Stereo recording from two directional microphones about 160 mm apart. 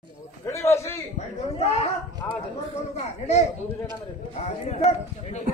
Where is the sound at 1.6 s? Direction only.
40° left (ahead or behind).